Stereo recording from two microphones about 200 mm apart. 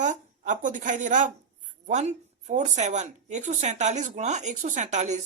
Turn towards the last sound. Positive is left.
turn(degrees=-35)  # may be behind; listen again after turning